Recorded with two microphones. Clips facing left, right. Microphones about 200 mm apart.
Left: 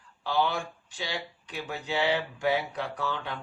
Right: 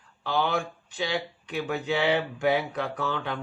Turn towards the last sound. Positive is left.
turn(degrees=-55)  # may be behind; listen again after turning